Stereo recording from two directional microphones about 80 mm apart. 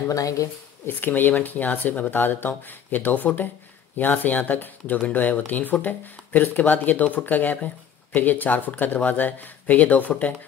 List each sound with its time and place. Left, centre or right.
0.1 s speech: left
0.8 s speech: left